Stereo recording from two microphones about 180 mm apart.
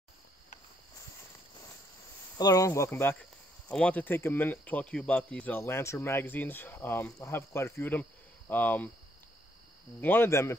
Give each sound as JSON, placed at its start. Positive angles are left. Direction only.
{"t": 2.3, "sound": "speech", "side_deg": 20}
{"t": 9.9, "sound": "speech", "side_deg": 10}